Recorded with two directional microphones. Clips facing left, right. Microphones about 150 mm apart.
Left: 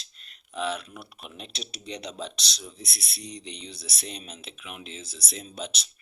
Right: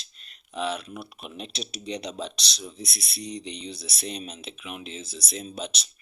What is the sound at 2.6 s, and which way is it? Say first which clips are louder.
Speech: right 6 dB; 20° right (ahead or behind).